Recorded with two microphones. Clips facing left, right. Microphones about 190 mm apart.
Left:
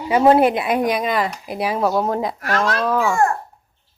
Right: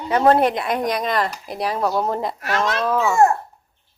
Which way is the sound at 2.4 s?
20° right (ahead or behind).